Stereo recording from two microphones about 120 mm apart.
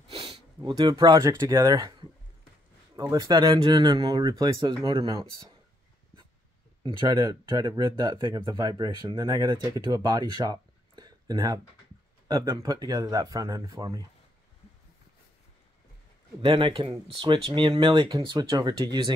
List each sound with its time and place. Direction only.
0.1 s sniff: 45° right (ahead or behind)
0.6 s speech: 30° right (ahead or behind)
6.8 s speech: 40° right (ahead or behind)
16.3 s speech: 45° right (ahead or behind)